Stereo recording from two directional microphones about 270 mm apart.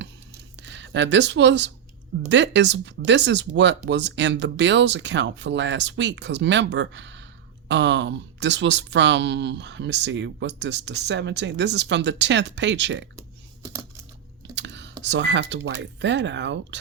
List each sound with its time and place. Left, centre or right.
0.5 s speech: right
14.5 s computer keyboard: right
15.0 s speech: right